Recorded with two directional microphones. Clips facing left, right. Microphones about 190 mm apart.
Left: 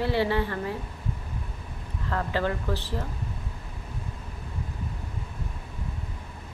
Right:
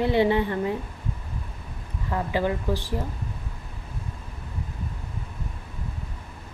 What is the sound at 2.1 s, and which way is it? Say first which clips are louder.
Speech: right 2 dB; 15° right (ahead or behind).